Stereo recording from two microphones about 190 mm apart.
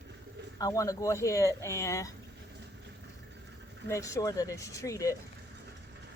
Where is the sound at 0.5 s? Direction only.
20° left (ahead or behind).